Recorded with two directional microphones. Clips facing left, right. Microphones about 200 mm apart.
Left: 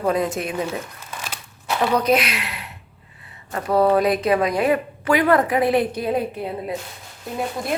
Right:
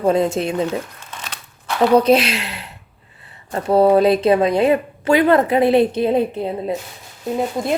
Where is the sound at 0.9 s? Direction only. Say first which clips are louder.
Left 1 dB; 5° left (ahead or behind).